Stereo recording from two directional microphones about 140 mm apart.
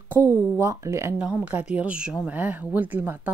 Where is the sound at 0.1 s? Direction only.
15° right (ahead or behind).